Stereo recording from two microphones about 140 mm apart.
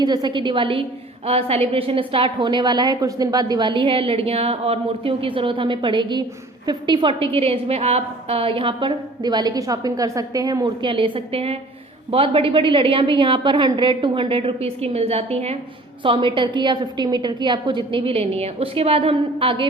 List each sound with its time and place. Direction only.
0.0 s a woman's voice: 30° right (ahead or behind); by 15.5 s 50° right (ahead or behind)
16.0 s a woman's voice: 35° right (ahead or behind)